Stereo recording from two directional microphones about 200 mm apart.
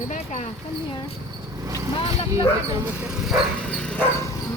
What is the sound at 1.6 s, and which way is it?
Vehicle, 15° right (ahead or behind).